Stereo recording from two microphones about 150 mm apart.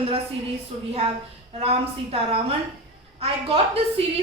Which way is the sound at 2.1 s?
40° right (ahead or behind).